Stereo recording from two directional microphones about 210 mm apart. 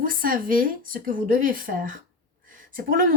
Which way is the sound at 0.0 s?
40° right (ahead or behind).